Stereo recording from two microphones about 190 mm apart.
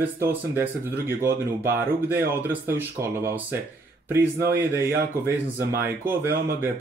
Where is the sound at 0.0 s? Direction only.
10° right (ahead or behind).